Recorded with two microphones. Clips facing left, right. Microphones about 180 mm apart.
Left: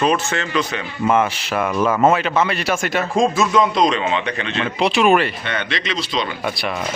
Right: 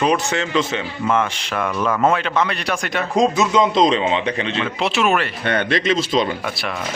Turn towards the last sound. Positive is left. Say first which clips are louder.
# left 2 dB
turn(degrees=0)  # may be behind; listen again after turning